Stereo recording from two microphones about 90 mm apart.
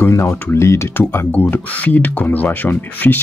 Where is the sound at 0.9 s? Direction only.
20° left (ahead or behind).